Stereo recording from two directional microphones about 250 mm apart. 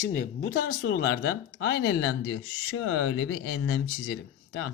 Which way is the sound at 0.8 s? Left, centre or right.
Left.